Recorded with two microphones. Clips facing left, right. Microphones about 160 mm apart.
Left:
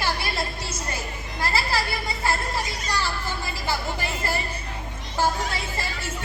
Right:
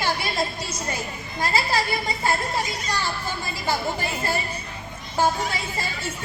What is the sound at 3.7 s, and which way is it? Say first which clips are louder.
Speech: right 3 dB; 15° right (ahead or behind).